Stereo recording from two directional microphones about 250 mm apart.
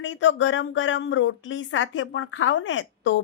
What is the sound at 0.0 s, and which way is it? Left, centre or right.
A woman's voice, left.